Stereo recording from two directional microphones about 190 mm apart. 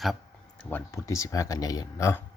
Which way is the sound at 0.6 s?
10° left (ahead or behind).